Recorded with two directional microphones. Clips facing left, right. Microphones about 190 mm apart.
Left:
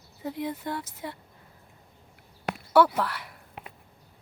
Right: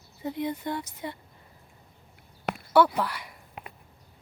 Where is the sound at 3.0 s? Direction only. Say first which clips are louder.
Even; centre (ahead or behind).